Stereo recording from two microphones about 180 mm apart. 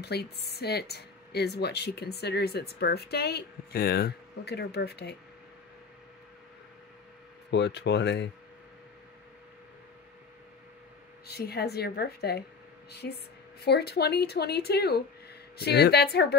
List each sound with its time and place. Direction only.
0.0 s speech: 65° left (ahead or behind)
7.5 s speech: 70° left (ahead or behind)
11.2 s speech: 60° left (ahead or behind)